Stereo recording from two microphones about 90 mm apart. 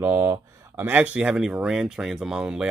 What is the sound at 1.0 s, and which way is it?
Speech, 10° right (ahead or behind).